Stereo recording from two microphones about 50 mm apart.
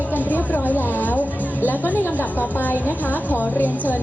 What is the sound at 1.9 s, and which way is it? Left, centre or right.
Speech, left.